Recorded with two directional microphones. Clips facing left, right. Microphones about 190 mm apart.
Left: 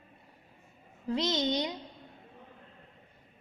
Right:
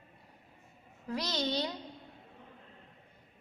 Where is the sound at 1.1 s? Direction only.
25° left (ahead or behind).